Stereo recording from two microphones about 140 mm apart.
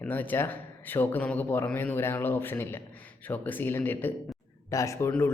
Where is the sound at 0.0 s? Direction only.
15° left (ahead or behind).